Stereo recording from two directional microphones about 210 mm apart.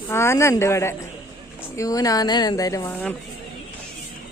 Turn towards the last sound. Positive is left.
turn(degrees=10)  # may be behind; listen again after turning